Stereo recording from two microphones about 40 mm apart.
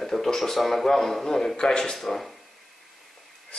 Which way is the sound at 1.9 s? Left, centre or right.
Centre.